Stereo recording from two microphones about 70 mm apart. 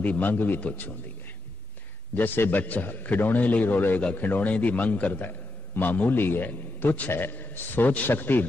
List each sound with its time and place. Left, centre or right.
0.0 s a man's voice: left
2.1 s a man's voice: left